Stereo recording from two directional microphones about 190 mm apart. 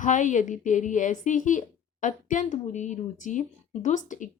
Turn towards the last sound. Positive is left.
turn(degrees=40)  # may be behind; listen again after turning